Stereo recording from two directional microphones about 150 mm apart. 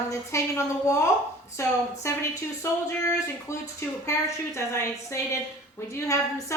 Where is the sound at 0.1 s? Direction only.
20° left (ahead or behind).